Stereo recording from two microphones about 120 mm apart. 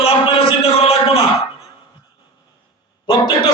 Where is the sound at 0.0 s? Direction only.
50° left (ahead or behind).